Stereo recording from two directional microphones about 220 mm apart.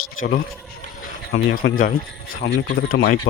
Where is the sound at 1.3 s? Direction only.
50° left (ahead or behind).